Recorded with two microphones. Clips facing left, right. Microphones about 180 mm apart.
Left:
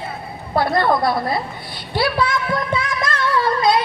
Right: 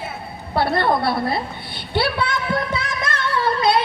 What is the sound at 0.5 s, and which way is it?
A woman's voice, 30° right (ahead or behind).